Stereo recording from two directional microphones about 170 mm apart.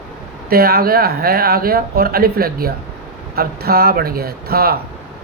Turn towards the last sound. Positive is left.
turn(degrees=-65)  # may be behind; listen again after turning